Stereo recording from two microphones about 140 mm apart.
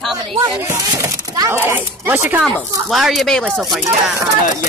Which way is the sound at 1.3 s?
20° right (ahead or behind).